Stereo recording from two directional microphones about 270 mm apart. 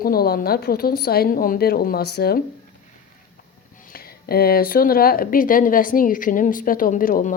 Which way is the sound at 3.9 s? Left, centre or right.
Left.